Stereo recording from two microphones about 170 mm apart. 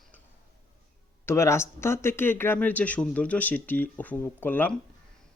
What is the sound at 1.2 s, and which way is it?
Speech, 15° left (ahead or behind).